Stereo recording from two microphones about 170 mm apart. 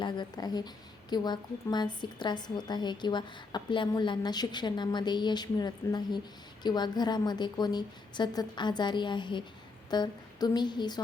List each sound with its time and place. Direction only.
0.0 s a woman's voice: 25° left (ahead or behind)